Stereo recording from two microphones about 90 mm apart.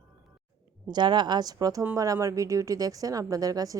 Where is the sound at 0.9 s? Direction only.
55° right (ahead or behind).